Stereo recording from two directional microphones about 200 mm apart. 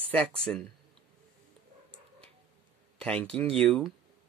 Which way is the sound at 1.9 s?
5° left (ahead or behind).